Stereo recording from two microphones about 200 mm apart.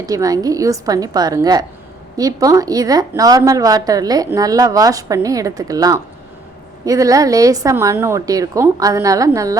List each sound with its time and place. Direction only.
0.0 s speech: 15° right (ahead or behind)